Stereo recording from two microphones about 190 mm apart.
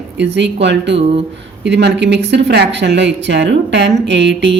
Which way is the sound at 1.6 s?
65° right (ahead or behind).